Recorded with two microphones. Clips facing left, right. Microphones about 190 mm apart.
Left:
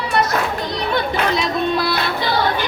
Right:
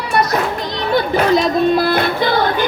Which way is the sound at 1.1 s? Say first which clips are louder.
Right 6 dB; 45° right (ahead or behind).